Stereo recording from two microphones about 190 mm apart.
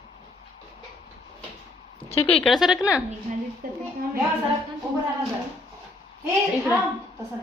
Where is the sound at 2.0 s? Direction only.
30° left (ahead or behind).